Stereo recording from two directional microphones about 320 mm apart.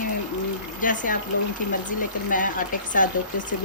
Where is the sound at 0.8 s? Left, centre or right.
Left.